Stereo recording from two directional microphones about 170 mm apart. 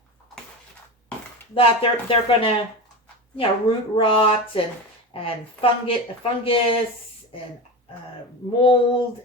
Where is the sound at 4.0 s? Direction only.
30° left (ahead or behind).